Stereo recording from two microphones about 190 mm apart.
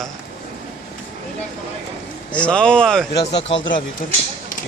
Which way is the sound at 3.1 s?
65° left (ahead or behind).